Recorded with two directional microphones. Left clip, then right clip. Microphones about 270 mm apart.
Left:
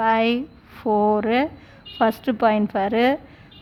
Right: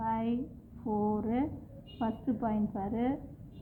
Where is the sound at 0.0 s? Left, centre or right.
Left.